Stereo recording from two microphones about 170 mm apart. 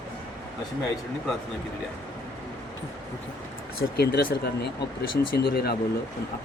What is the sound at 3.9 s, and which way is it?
Speech, 65° left (ahead or behind).